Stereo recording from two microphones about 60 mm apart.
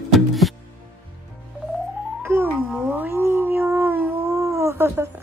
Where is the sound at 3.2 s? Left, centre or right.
Right.